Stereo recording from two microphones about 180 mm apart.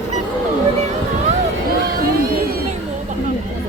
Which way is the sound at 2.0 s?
55° right (ahead or behind).